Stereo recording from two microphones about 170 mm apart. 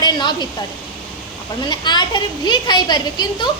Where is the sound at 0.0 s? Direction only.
25° left (ahead or behind).